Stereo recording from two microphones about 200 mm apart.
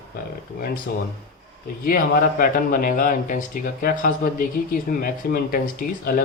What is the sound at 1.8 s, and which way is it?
Speech, 45° left (ahead or behind).